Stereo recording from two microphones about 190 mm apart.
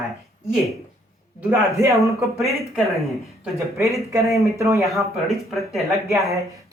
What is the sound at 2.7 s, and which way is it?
Speech, centre (ahead or behind).